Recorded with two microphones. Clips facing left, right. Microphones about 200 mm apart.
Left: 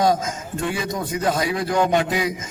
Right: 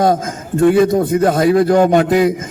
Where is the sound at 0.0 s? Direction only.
55° right (ahead or behind).